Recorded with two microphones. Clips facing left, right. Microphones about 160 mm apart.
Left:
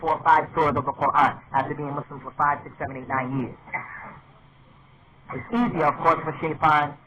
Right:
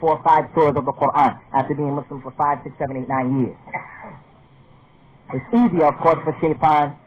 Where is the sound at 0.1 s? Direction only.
35° right (ahead or behind).